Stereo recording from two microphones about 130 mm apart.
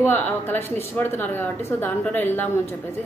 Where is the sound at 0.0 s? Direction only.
15° left (ahead or behind).